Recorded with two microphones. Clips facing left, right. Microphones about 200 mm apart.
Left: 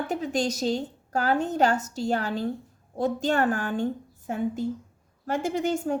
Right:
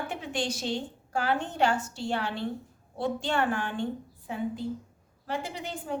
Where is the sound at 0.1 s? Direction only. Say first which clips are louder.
Left 6 dB; 40° left (ahead or behind).